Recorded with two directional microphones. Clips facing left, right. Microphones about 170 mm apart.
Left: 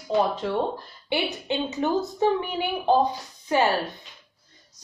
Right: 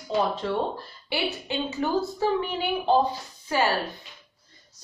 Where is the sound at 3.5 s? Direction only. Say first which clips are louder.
Left 3 dB; 20° left (ahead or behind).